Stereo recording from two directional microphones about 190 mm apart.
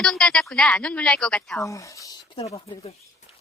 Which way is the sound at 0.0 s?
5° left (ahead or behind).